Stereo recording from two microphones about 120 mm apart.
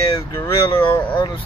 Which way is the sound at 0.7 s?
20° left (ahead or behind).